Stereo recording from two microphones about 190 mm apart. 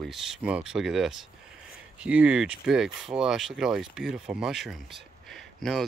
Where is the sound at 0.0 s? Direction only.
Centre (ahead or behind).